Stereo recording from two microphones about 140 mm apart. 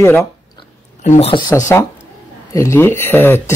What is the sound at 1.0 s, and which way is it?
Speech, 60° left (ahead or behind).